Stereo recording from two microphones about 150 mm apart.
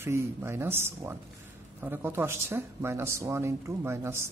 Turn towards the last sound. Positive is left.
turn(degrees=-15)  # may be behind; listen again after turning